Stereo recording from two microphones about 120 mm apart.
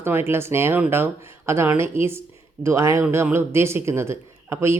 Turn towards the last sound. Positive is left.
turn(degrees=-20)  # may be behind; listen again after turning